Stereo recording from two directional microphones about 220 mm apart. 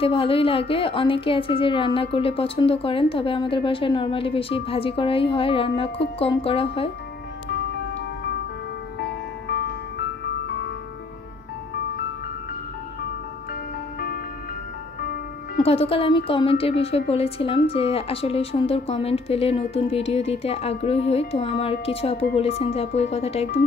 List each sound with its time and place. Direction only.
0.0 s a woman's voice: 25° left (ahead or behind)
9.0 s music: 45° left (ahead or behind)
13.9 s music: 40° left (ahead or behind)
15.6 s a woman's voice: 25° left (ahead or behind)